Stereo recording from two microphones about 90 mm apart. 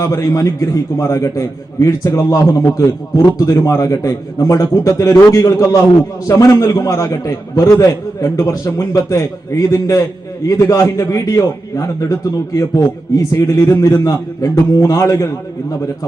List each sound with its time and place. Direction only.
0.0 s a man's voice: 40° left (ahead or behind)